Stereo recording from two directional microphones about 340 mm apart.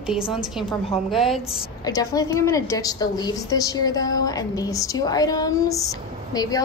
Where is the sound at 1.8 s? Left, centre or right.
Centre.